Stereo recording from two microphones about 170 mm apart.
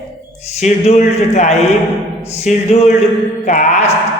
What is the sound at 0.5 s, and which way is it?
A man's voice, 40° left (ahead or behind).